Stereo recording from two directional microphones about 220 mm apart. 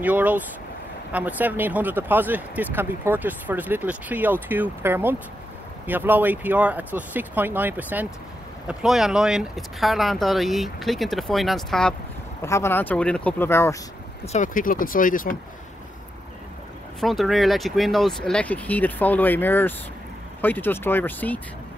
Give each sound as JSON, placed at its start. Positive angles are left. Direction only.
{"t": 0.0, "sound": "speech", "side_deg": -5}
{"t": 12.4, "sound": "speech", "side_deg": 10}
{"t": 14.2, "sound": "speech", "side_deg": 35}
{"t": 17.0, "sound": "speech", "side_deg": 0}